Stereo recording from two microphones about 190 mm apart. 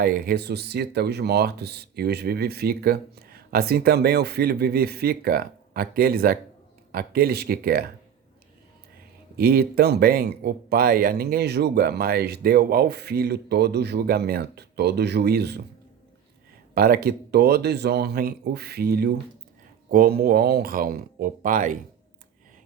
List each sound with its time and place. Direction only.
0.0 s speech: 50° right (ahead or behind)
9.3 s speech: 55° right (ahead or behind)
16.7 s speech: 50° right (ahead or behind)